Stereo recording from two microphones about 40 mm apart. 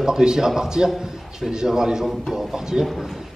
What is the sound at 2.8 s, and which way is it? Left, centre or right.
Speech, centre.